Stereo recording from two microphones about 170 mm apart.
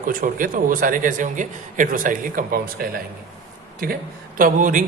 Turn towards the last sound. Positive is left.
turn(degrees=-50)  # may be behind; listen again after turning